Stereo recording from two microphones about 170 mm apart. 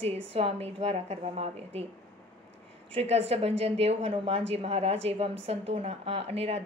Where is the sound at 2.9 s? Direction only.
35° right (ahead or behind).